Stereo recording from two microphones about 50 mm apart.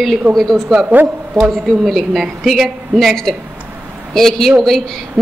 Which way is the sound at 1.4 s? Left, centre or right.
Centre.